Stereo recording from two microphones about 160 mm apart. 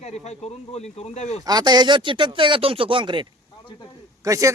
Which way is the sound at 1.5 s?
25° right (ahead or behind).